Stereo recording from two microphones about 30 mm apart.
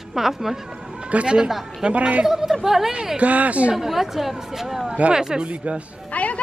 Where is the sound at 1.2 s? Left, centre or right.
Right.